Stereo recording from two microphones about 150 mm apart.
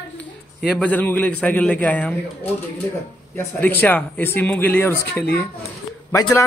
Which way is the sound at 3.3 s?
10° left (ahead or behind).